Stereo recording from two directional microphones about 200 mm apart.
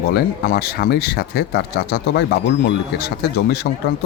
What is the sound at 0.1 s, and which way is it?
Speech, 55° left (ahead or behind).